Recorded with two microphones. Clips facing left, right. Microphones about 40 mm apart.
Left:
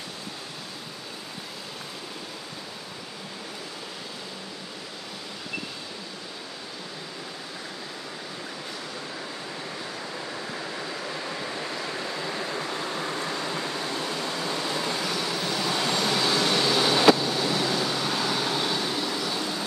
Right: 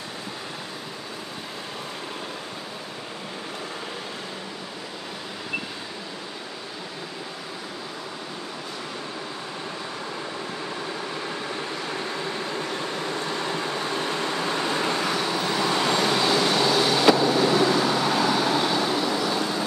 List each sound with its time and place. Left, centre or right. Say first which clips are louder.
13.3 s vehicle: right 3 dB; right
16.6 s vehicle: right 2 dB; centre
17.2 s vehicle: right 6 dB; right
17.5 s vehicle: right 6 dB; right